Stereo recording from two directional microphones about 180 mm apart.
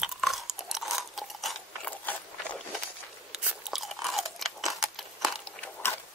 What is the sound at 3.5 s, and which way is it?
Crunch, centre (ahead or behind).